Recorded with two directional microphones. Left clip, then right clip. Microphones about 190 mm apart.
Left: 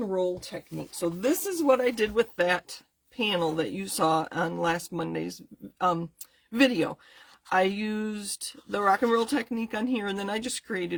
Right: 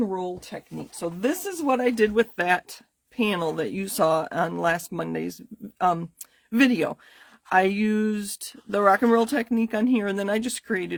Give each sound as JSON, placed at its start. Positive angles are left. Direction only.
{"t": 0.1, "sound": "speech", "side_deg": -40}